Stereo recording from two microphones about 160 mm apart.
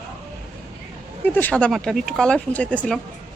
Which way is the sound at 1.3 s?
10° left (ahead or behind).